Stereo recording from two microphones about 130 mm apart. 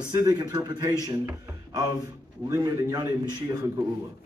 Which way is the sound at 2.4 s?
25° right (ahead or behind).